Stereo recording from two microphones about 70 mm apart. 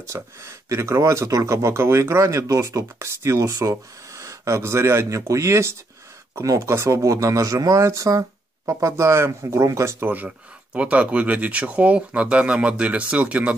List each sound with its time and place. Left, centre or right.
0.0 s speech: right
9.9 s speech: right